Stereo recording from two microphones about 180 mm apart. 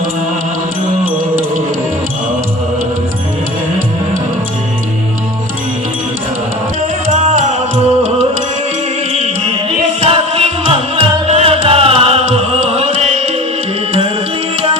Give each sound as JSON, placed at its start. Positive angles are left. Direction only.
{"t": 7.1, "sound": "music", "side_deg": -40}